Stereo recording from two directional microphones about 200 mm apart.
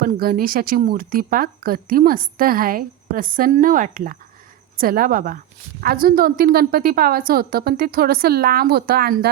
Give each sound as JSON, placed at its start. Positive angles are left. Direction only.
{"t": 0.0, "sound": "speech", "side_deg": -50}